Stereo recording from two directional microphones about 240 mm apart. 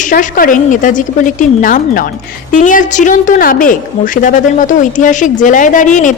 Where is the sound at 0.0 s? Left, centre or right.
Left.